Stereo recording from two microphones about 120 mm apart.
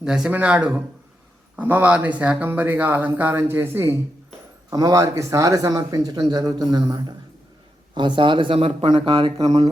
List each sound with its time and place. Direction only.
0.0 s speech: 5° right (ahead or behind); by 9.3 s 45° right (ahead or behind)
9.4 s speech: 30° right (ahead or behind)